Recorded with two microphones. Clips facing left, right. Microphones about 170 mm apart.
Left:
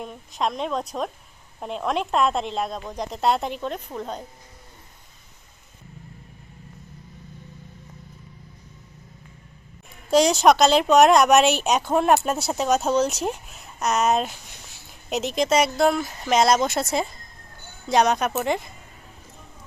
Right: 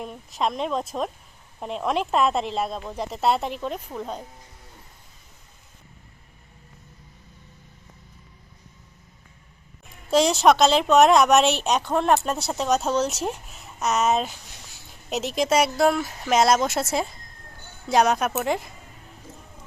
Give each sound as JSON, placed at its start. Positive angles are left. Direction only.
{"t": 0.0, "sound": "speech", "side_deg": 0}
{"t": 10.1, "sound": "speech", "side_deg": 0}